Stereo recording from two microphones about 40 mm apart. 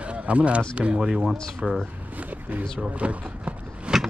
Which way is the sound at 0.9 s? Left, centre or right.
Centre.